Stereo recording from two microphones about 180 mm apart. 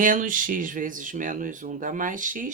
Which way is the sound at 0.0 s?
50° right (ahead or behind).